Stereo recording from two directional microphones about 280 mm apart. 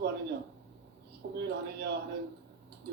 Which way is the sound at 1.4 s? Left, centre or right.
Right.